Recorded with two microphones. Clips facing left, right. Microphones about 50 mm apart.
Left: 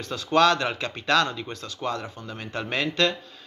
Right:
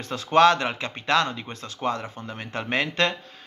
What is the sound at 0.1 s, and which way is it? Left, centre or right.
Speech, right.